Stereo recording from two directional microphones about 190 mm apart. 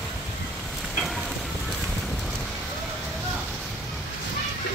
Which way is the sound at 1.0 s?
Centre (ahead or behind).